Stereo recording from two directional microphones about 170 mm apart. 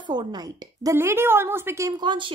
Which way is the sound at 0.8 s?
15° right (ahead or behind).